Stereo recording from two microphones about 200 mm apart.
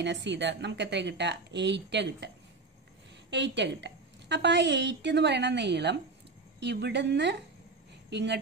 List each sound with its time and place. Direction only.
0.0 s a woman's voice: 60° right (ahead or behind)